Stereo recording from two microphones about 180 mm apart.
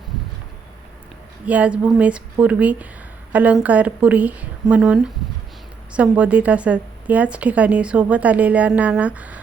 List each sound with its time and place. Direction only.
1.5 s a woman's voice: 5° right (ahead or behind)